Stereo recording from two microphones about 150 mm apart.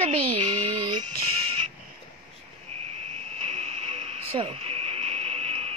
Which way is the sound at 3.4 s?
45° right (ahead or behind).